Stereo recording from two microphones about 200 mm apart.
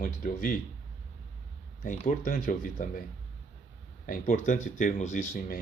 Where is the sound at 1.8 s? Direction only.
40° left (ahead or behind).